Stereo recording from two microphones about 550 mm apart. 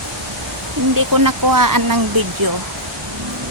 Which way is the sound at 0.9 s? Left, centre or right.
Right.